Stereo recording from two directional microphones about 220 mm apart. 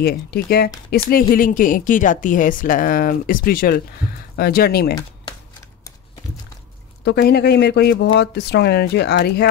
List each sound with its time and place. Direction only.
0.0 s a woman's voice: 45° left (ahead or behind)
7.1 s speech: 45° left (ahead or behind)